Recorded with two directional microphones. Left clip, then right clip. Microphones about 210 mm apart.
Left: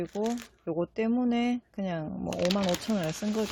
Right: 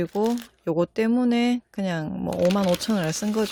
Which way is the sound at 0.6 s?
40° right (ahead or behind).